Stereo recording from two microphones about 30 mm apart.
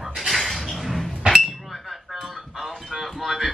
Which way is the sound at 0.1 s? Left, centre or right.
Centre.